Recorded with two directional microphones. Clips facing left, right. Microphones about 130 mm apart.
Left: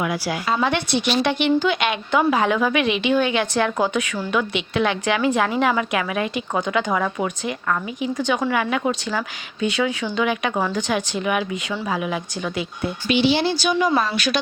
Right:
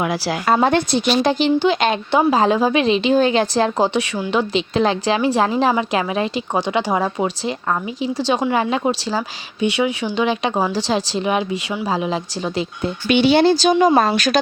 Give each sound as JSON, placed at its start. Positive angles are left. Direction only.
{"t": 0.0, "sound": "a woman's voice", "side_deg": -35}
{"t": 0.4, "sound": "a woman's voice", "side_deg": -45}
{"t": 13.1, "sound": "speech", "side_deg": -55}